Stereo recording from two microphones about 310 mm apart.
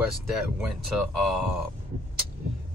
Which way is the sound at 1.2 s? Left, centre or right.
Centre.